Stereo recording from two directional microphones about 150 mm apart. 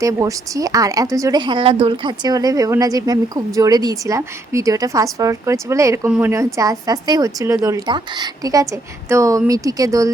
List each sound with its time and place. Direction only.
0.0 s speech: 20° right (ahead or behind)
6.1 s a woman's voice: 10° right (ahead or behind)
6.3 s speech: 20° right (ahead or behind)